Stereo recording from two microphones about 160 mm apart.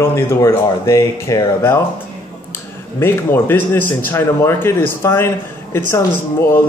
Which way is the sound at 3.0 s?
15° left (ahead or behind).